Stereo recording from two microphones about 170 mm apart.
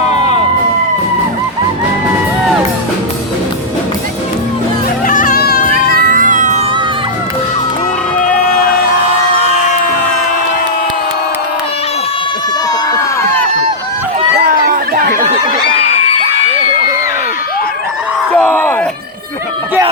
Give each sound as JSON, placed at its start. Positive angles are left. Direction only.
{"t": 0.1, "sound": "a sound", "side_deg": 40}
{"t": 5.0, "sound": "music", "side_deg": 55}
{"t": 5.9, "sound": "music", "side_deg": -55}
{"t": 9.3, "sound": "crowd", "side_deg": 40}
{"t": 14.3, "sound": "chatter", "side_deg": -60}
{"t": 18.3, "sound": "a sound", "side_deg": 10}